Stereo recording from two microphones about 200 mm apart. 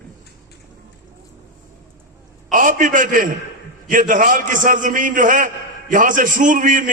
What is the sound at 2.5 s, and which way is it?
A man's voice, 40° right (ahead or behind).